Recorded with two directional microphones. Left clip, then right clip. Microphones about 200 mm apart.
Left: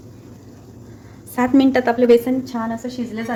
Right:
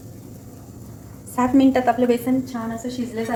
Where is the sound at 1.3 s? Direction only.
40° left (ahead or behind).